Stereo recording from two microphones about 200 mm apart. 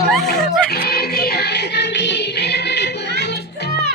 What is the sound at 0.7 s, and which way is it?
Music, 50° left (ahead or behind).